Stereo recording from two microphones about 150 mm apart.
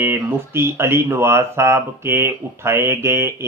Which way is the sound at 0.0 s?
15° right (ahead or behind).